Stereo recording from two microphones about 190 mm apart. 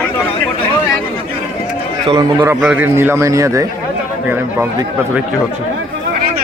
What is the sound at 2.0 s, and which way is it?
Speech, 20° right (ahead or behind).